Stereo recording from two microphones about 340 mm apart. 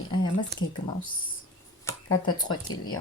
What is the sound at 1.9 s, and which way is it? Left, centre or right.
Speech, centre.